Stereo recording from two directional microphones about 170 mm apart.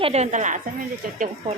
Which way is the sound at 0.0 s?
40° right (ahead or behind).